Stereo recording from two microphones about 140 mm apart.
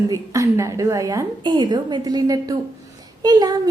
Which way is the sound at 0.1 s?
20° right (ahead or behind).